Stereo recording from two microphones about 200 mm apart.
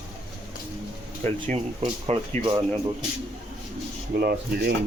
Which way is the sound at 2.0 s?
25° right (ahead or behind).